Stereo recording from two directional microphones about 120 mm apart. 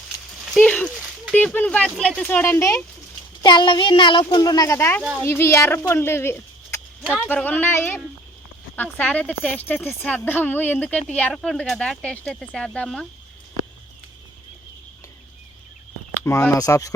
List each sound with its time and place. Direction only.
0.4 s a sound: 5° right (ahead or behind)
1.3 s speech: 10° left (ahead or behind)
3.4 s speech: 40° left (ahead or behind); by 13.1 s 10° left (ahead or behind)
16.5 s speech: 25° left (ahead or behind)